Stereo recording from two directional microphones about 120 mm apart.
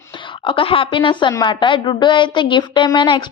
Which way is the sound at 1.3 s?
40° left (ahead or behind).